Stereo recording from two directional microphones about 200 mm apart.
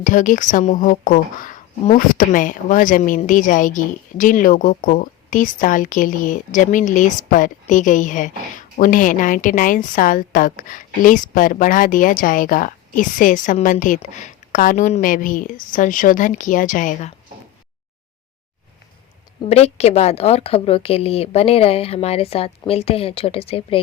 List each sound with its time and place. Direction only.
0.0 s speech: 40° left (ahead or behind)
19.5 s a woman's voice: 30° left (ahead or behind)